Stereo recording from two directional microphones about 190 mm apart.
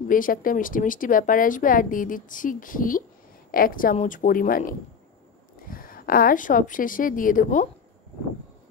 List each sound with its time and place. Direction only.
0.1 s a woman's voice: 45° left (ahead or behind)